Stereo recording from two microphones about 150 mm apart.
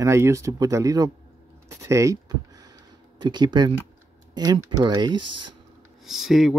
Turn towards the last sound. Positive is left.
turn(degrees=0)  # may be behind; listen again after turning